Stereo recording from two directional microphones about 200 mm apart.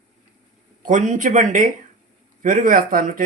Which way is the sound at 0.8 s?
40° right (ahead or behind).